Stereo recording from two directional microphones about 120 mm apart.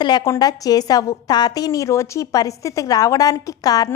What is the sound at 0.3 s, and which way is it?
A woman's voice, 30° left (ahead or behind).